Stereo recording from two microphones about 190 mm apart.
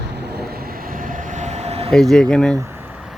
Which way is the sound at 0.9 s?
45° right (ahead or behind).